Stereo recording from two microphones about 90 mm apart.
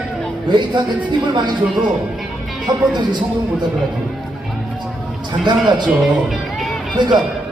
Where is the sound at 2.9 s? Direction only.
55° right (ahead or behind).